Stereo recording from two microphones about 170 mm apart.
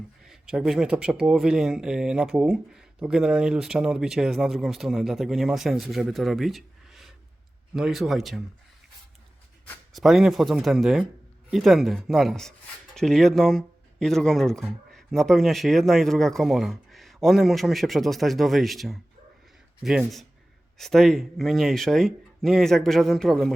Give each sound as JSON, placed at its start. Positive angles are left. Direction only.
{"t": 0.2, "sound": "speech", "side_deg": 0}
{"t": 9.9, "sound": "speech", "side_deg": 0}